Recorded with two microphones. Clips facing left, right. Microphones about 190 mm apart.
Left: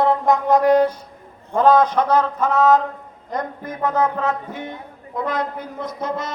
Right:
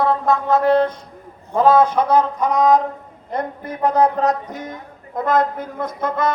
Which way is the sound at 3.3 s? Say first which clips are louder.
Right 2 dB; 35° right (ahead or behind).